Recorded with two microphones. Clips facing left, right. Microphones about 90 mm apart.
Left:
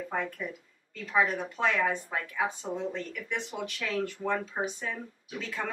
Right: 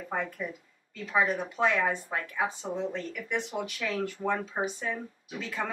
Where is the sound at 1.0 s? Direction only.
5° right (ahead or behind).